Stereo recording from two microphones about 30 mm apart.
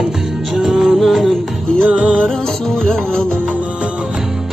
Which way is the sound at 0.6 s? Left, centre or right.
Centre.